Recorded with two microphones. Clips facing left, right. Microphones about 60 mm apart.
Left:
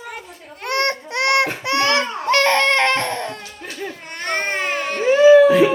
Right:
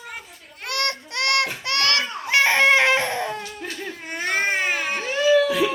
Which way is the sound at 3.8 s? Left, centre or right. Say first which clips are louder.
Left 3 dB; centre.